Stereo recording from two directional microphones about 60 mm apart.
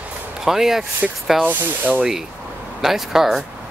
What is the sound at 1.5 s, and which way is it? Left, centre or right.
Speech, right.